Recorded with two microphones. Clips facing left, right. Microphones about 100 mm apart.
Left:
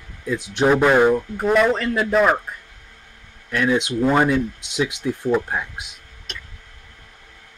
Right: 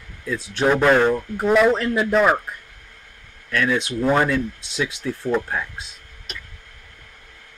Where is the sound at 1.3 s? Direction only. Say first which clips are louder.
Right 1 dB; centre (ahead or behind).